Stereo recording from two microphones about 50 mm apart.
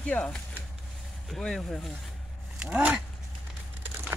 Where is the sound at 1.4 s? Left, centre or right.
Centre.